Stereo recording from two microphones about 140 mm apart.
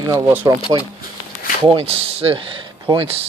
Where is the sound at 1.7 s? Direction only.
40° right (ahead or behind).